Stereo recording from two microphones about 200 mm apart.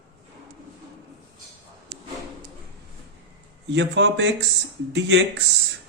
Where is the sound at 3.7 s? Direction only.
60° right (ahead or behind).